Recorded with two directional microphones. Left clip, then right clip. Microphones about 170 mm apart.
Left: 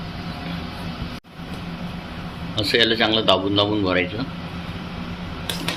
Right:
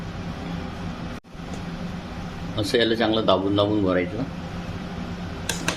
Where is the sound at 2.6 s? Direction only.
15° right (ahead or behind).